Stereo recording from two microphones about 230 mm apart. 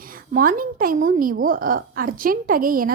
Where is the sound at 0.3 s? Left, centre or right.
Right.